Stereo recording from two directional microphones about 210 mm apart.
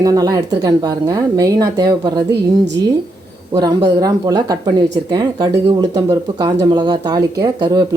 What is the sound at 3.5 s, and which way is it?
Speech, 20° right (ahead or behind).